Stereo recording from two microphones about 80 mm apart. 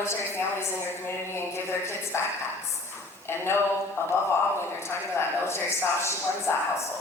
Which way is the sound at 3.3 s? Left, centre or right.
Left.